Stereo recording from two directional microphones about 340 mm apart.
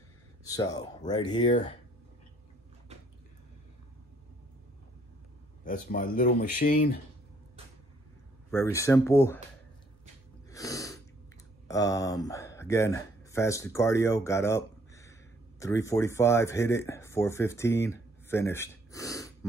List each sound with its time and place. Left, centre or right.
0.4 s speech: centre
5.6 s speech: left
8.5 s speech: centre
10.5 s sneeze: centre
11.6 s speech: centre